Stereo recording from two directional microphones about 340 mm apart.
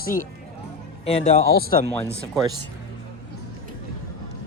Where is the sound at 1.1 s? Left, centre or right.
Left.